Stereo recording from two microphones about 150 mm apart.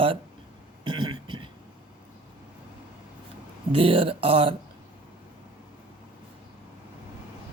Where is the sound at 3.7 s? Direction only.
40° right (ahead or behind).